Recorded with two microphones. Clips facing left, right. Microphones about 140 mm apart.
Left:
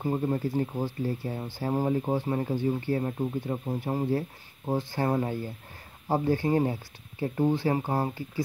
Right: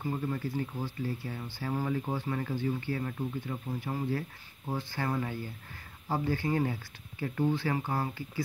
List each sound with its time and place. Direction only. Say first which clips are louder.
0.0 s speech: left 6 dB; 35° left (ahead or behind)